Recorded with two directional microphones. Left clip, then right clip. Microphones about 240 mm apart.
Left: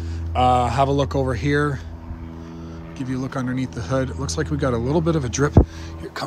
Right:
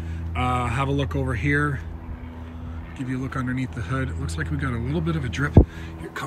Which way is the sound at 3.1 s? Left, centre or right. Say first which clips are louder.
Left 2 dB; centre.